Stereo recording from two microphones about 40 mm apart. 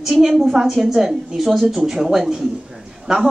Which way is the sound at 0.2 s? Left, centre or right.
Centre.